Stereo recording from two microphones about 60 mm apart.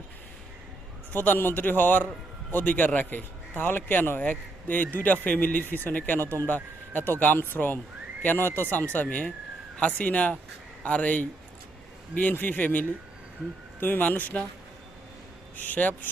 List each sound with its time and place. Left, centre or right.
1.1 s a man's voice: left
8.9 s speech: left
12.3 s a man's voice: left
15.5 s speech: left